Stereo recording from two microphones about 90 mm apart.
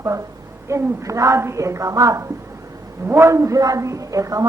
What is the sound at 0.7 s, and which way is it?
A man's voice, 35° right (ahead or behind).